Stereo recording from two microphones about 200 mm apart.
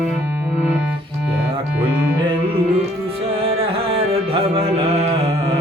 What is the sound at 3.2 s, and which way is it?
Music, 30° right (ahead or behind).